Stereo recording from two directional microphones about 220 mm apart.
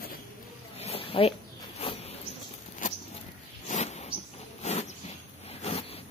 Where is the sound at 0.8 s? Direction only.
25° left (ahead or behind).